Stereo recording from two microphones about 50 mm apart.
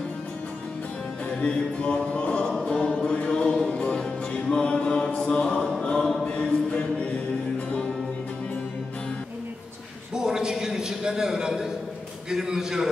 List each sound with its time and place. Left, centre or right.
1.2 s music: left
2.6 s choir: centre
3.1 s mantra: left
4.2 s music: left
5.1 s mantra: centre
5.8 s choir: left
10.1 s a man's voice: centre